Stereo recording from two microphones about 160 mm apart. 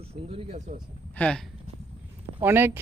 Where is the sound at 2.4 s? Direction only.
15° right (ahead or behind).